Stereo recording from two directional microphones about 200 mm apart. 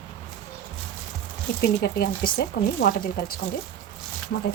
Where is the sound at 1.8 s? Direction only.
50° left (ahead or behind).